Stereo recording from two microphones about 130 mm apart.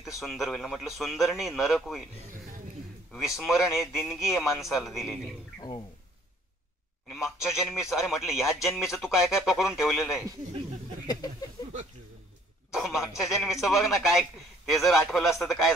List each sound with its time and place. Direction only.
0.0 s a man's voice: centre (ahead or behind)
3.3 s a man's voice: 5° right (ahead or behind)
5.6 s speech: 30° left (ahead or behind)
7.4 s a man's voice: 5° right (ahead or behind)
11.1 s speech: 30° left (ahead or behind)
12.7 s a man's voice: centre (ahead or behind)